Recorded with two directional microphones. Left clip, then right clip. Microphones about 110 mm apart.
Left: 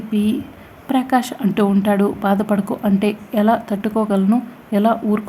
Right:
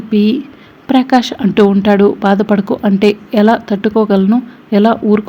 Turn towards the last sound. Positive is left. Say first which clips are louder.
# right 7 dB
turn(degrees=-25)  # may be behind; listen again after turning